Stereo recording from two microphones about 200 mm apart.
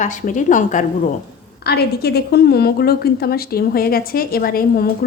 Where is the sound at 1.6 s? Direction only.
55° left (ahead or behind).